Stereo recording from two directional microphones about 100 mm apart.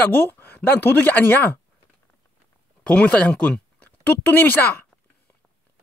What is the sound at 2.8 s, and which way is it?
Speech, 10° left (ahead or behind).